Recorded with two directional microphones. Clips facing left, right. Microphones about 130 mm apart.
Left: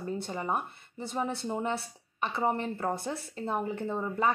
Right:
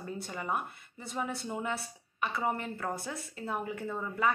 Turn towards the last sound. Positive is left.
turn(degrees=25)  # may be behind; listen again after turning